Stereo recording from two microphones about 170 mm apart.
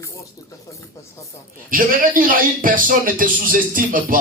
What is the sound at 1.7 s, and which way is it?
Speech, 55° right (ahead or behind).